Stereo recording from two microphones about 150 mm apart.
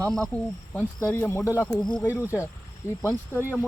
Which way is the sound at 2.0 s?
20° left (ahead or behind).